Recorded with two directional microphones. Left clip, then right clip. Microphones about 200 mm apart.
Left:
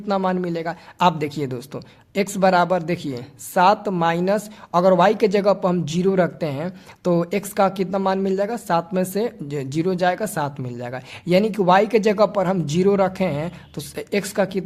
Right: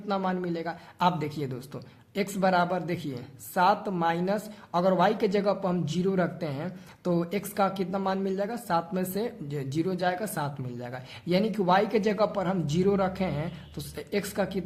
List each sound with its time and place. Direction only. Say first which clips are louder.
0.1 s a man's voice: left 8 dB; 35° left (ahead or behind)